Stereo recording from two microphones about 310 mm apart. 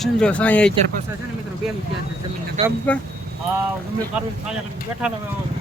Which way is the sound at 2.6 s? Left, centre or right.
Centre.